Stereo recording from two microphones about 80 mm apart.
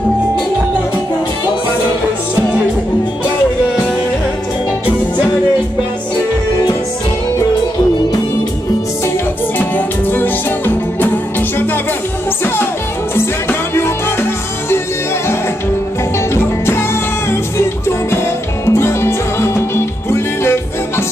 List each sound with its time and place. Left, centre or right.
9.6 s music: left
13.1 s music: left
17.3 s music: left